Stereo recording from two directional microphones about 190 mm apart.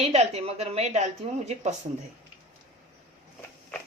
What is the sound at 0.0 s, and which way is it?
Speech, 35° right (ahead or behind).